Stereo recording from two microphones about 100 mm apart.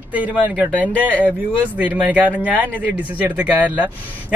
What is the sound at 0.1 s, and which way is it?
Speech, 15° right (ahead or behind).